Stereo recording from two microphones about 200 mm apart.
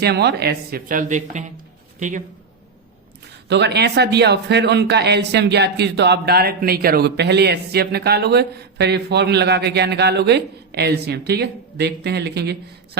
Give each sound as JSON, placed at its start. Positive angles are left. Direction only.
{"t": 0.0, "sound": "speech", "side_deg": -55}
{"t": 3.5, "sound": "speech", "side_deg": -60}